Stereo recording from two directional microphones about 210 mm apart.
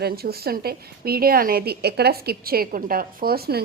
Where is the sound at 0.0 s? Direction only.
45° right (ahead or behind).